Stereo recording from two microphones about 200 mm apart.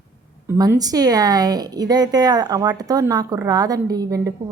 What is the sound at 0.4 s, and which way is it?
A woman's voice, 10° right (ahead or behind).